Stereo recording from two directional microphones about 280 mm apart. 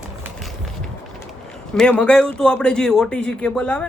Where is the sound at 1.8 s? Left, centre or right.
Centre.